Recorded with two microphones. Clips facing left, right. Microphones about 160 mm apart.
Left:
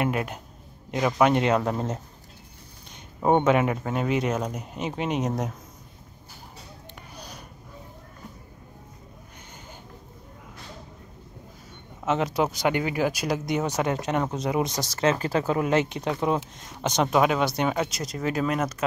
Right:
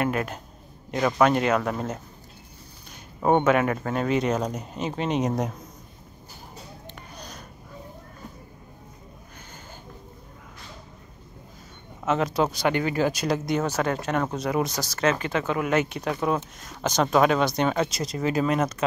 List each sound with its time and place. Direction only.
0.0 s speech: 15° left (ahead or behind)
1.3 s speech: 25° left (ahead or behind)
3.2 s speech: 15° left (ahead or behind)
5.2 s speech: centre (ahead or behind)
7.2 s a sound: 10° left (ahead or behind)
12.1 s speech: 15° left (ahead or behind)
17.9 s speech: centre (ahead or behind)